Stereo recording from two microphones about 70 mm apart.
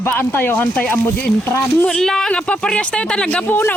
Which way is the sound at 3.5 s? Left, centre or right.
Left.